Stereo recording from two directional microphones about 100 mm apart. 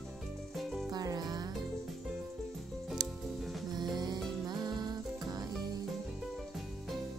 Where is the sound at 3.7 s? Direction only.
45° right (ahead or behind).